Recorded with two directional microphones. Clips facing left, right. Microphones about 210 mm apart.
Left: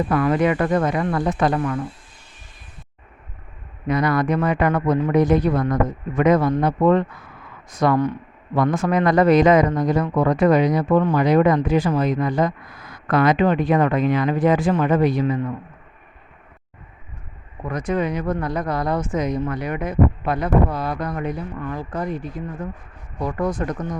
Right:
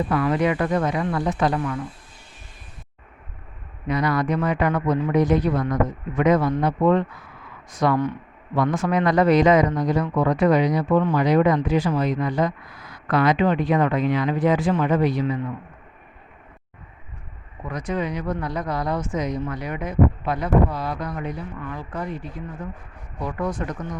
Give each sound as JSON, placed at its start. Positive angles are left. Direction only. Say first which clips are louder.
{"t": 0.1, "sound": "speech", "louder": "left 3 dB", "side_deg": 50}
{"t": 3.8, "sound": "speech", "louder": "left 3 dB", "side_deg": 50}
{"t": 17.7, "sound": "speech", "louder": "left 4 dB", "side_deg": 50}